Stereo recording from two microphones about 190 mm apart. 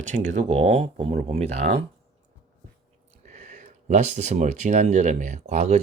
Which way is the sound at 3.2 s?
40° right (ahead or behind).